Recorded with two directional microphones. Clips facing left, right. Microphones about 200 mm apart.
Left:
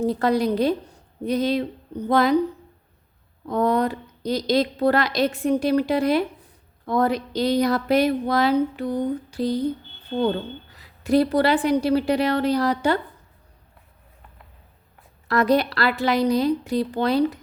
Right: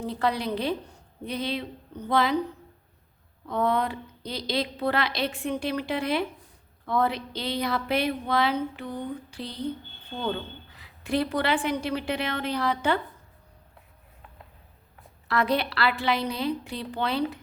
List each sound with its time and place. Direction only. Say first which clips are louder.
0.0 s a woman's voice: left 7 dB; 45° left (ahead or behind)
3.4 s speech: left 5 dB; 40° left (ahead or behind)
15.3 s speech: left 6 dB; 40° left (ahead or behind)